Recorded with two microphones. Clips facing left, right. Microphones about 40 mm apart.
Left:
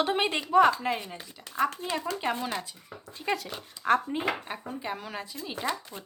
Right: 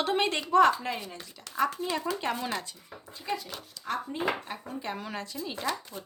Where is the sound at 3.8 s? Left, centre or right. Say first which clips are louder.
Left 7 dB; left; by 5.2 s centre.